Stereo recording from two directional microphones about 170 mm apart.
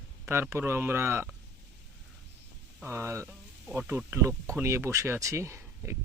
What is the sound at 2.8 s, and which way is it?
Speech, 15° right (ahead or behind).